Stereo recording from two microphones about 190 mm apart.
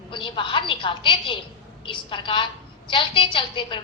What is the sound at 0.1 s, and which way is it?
A woman's voice, 25° left (ahead or behind).